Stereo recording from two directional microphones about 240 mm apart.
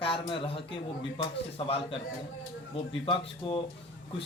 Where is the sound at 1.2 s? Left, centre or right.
Left.